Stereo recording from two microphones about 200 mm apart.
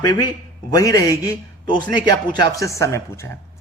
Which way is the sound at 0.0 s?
20° left (ahead or behind).